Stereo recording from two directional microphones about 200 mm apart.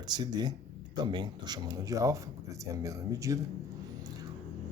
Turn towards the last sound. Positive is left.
turn(degrees=-15)  # may be behind; listen again after turning